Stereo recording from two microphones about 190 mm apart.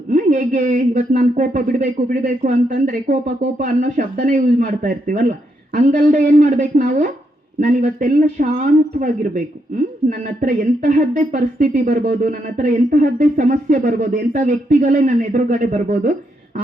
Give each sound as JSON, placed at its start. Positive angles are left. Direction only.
{"t": 0.1, "sound": "speech", "side_deg": -40}